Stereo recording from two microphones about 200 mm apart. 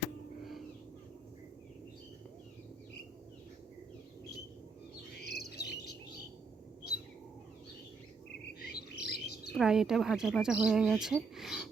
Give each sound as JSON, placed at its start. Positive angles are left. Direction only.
{"t": 5.2, "sound": "bird", "side_deg": 55}
{"t": 8.6, "sound": "chirp", "side_deg": 50}
{"t": 9.6, "sound": "speech", "side_deg": -5}